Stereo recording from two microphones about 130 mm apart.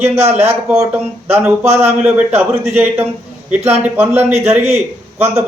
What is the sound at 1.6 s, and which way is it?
Speech, 55° right (ahead or behind).